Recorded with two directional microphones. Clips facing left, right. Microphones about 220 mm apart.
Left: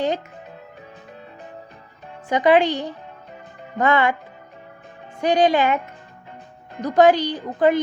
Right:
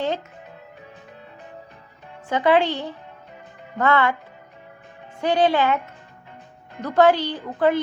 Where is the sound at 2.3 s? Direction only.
15° left (ahead or behind).